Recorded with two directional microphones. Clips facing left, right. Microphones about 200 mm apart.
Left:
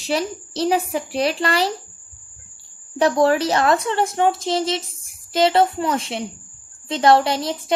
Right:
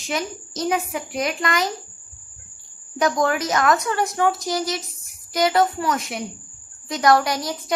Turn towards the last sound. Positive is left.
turn(degrees=25)  # may be behind; listen again after turning